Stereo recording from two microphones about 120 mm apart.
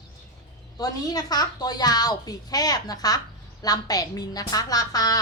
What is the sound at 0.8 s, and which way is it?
A woman's voice, 30° left (ahead or behind).